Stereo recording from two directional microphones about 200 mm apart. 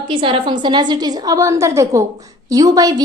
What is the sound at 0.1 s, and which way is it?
A woman's voice, 25° right (ahead or behind).